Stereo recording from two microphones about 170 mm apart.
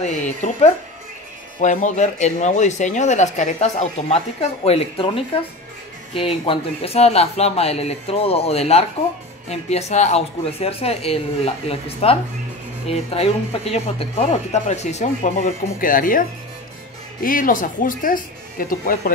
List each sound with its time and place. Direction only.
0.0 s speech: 45° left (ahead or behind)